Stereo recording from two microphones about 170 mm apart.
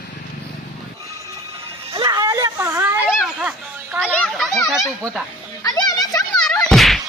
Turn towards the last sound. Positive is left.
turn(degrees=0)  # may be behind; listen again after turning